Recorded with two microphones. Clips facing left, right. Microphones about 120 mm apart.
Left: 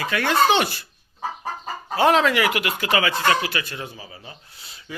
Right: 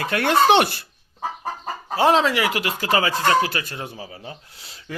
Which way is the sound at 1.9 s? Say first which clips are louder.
Even; 30° right (ahead or behind).